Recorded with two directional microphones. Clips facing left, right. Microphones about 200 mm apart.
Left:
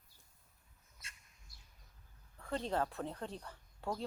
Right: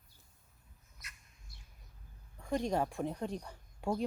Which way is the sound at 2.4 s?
15° right (ahead or behind).